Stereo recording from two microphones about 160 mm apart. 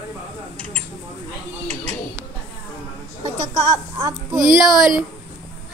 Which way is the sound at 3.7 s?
20° right (ahead or behind).